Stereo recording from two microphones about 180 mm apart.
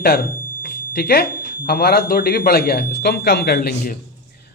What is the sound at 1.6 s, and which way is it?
Speech, 60° left (ahead or behind).